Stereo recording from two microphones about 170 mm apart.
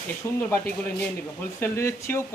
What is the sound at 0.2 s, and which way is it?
Speech, 20° left (ahead or behind).